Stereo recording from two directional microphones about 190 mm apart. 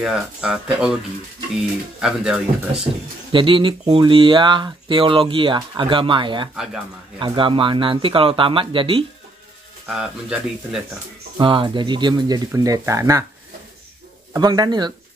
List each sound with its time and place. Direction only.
0.0 s speech: 5° right (ahead or behind)
2.0 s speech: 5° right (ahead or behind)
3.3 s speech: 25° right (ahead or behind)
6.5 s speech: 5° right (ahead or behind)
7.2 s speech: 25° right (ahead or behind)
11.3 s speech: 25° right (ahead or behind)
14.3 s speech: 20° right (ahead or behind)